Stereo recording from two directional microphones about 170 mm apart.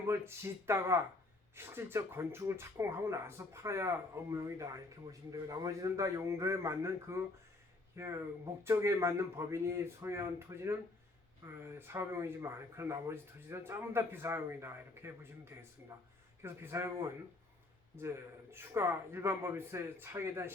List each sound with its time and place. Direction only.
0.1 s speech: 15° right (ahead or behind)
18.5 s speech: 15° right (ahead or behind)